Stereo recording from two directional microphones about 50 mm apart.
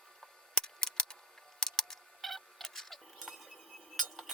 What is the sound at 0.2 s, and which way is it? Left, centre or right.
Camera, centre.